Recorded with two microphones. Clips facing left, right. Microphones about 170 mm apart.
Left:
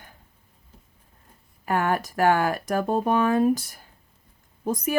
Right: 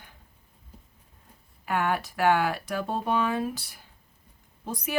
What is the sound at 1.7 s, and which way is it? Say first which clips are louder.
Speech: left 3 dB; 40° left (ahead or behind).